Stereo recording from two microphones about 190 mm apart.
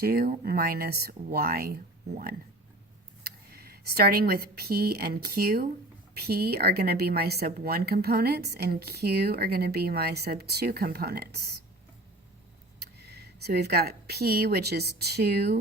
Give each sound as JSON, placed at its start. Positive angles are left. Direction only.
{"t": 0.0, "sound": "speech", "side_deg": -50}
{"t": 12.8, "sound": "speech", "side_deg": -60}